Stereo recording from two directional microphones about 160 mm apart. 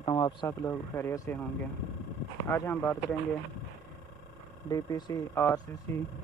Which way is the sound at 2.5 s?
15° left (ahead or behind).